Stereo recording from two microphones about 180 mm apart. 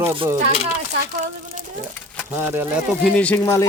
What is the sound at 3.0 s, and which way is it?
Speech, 5° left (ahead or behind).